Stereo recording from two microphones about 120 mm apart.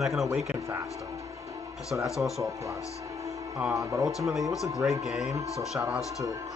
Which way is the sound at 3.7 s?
25° right (ahead or behind).